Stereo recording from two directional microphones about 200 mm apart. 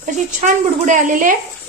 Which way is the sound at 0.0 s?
35° right (ahead or behind).